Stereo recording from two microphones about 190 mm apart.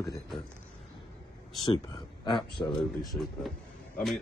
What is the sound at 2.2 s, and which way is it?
Speech, 25° left (ahead or behind).